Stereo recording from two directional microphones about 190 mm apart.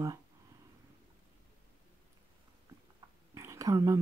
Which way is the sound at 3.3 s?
15° right (ahead or behind).